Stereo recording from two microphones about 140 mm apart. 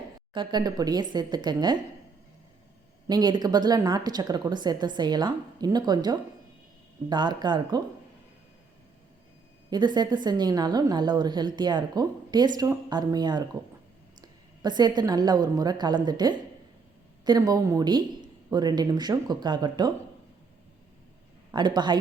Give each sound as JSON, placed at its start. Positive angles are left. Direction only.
{"t": 0.3, "sound": "a woman's voice", "side_deg": -30}
{"t": 3.1, "sound": "a woman's voice", "side_deg": -30}
{"t": 9.6, "sound": "a woman's voice", "side_deg": -30}
{"t": 21.5, "sound": "a woman's voice", "side_deg": -30}